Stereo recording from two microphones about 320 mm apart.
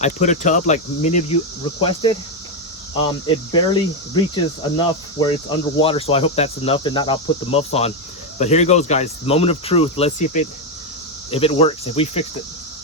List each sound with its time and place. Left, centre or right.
0.0 s speech: left